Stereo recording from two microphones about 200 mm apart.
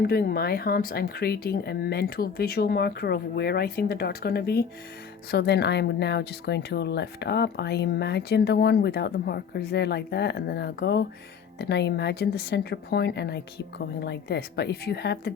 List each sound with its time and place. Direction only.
0.0 s speech: 50° left (ahead or behind)